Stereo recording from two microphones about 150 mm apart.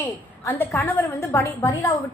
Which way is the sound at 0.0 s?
15° left (ahead or behind).